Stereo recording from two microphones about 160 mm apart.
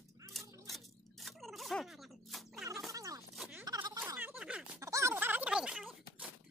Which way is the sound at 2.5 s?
20° right (ahead or behind).